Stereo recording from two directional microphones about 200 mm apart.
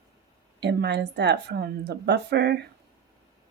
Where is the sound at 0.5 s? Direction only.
60° right (ahead or behind).